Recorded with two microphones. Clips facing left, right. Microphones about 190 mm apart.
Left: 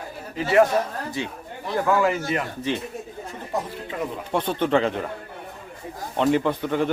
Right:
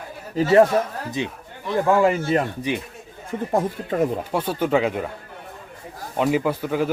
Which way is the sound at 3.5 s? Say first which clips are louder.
Right 6 dB; 45° right (ahead or behind).